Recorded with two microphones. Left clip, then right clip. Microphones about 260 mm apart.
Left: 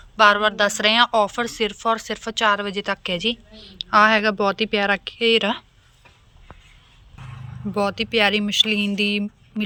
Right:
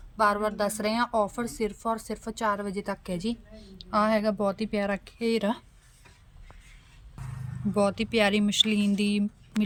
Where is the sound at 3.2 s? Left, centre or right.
Centre.